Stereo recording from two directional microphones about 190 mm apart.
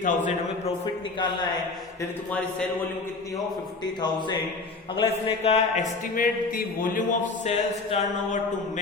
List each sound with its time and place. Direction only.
0.0 s a man's voice: 40° left (ahead or behind)
4.9 s a man's voice: 35° left (ahead or behind)
6.1 s speech: 45° left (ahead or behind)